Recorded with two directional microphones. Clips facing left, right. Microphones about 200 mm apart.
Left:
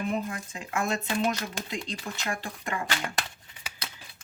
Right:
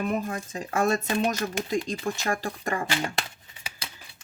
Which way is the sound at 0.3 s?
40° right (ahead or behind).